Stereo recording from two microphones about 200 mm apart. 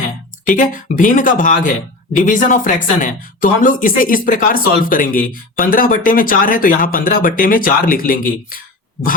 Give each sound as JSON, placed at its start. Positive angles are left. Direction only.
{"t": 0.4, "sound": "speech", "side_deg": 40}